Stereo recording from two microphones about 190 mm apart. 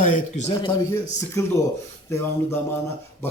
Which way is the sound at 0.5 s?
20° left (ahead or behind).